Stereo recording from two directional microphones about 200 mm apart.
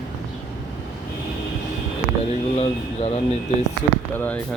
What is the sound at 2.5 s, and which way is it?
Speech, 30° left (ahead or behind).